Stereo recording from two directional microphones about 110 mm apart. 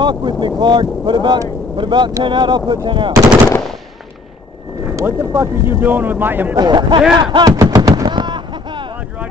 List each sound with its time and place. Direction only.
0.0 s speech: 45° right (ahead or behind)
4.9 s speech: 25° right (ahead or behind)
6.6 s speech: 40° right (ahead or behind)
7.2 s gunshot: 40° right (ahead or behind)